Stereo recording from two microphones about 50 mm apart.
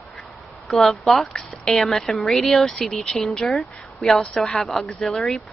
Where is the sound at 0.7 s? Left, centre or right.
Centre.